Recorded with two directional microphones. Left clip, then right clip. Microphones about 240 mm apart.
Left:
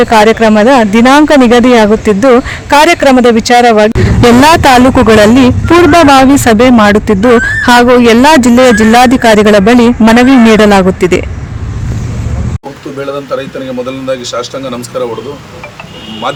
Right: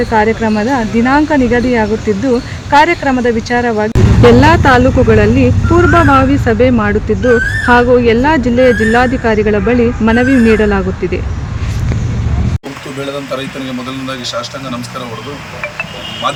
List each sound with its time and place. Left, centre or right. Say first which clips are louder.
0.1 s speech: left 7 dB; left